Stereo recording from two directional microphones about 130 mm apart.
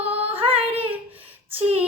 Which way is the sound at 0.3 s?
45° right (ahead or behind).